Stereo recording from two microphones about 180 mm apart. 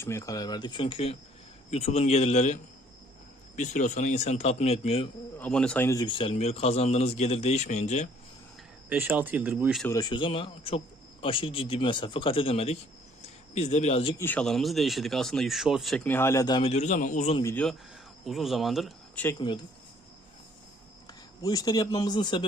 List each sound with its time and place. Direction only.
0.0 s a man's voice: 15° left (ahead or behind); by 5.0 s 35° left (ahead or behind)
5.4 s a man's voice: 5° left (ahead or behind); by 8.1 s 40° left (ahead or behind)
8.9 s speech: 10° right (ahead or behind)
9.8 s speech: 20° left (ahead or behind)
14.2 s speech: 10° left (ahead or behind); by 17.4 s 35° left (ahead or behind)
17.4 s speech: 10° left (ahead or behind)
19.4 s speech: 25° left (ahead or behind)
21.4 s speech: 20° left (ahead or behind)